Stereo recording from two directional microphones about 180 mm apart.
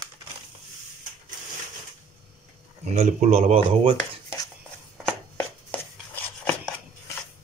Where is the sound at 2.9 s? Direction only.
35° right (ahead or behind).